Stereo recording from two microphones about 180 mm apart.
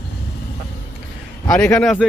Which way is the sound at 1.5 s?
10° left (ahead or behind).